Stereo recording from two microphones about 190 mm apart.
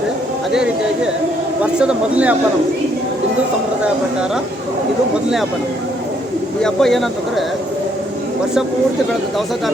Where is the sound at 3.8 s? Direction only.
5° right (ahead or behind).